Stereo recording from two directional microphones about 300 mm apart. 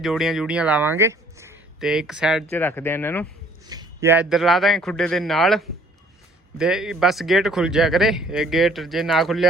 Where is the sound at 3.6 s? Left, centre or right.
Centre.